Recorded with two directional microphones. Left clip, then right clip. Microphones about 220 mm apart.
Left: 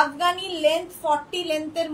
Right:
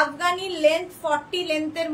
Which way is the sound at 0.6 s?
15° right (ahead or behind).